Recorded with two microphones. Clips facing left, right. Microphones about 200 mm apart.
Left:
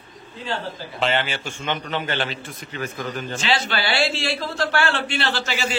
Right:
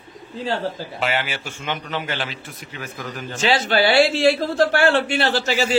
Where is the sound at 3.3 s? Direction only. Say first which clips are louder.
Right 7 dB; 45° right (ahead or behind).